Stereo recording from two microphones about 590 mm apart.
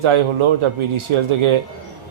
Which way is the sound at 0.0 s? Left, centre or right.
Right.